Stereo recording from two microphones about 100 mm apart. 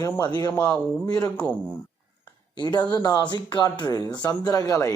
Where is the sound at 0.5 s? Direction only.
15° left (ahead or behind).